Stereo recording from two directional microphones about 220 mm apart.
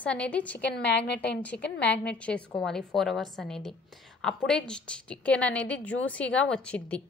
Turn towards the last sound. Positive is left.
turn(degrees=5)  # may be behind; listen again after turning